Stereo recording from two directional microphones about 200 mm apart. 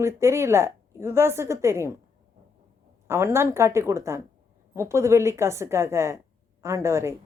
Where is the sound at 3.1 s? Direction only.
15° right (ahead or behind).